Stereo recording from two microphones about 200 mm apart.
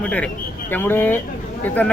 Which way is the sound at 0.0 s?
5° left (ahead or behind).